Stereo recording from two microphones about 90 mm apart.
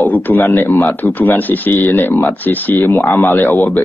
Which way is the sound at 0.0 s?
20° left (ahead or behind).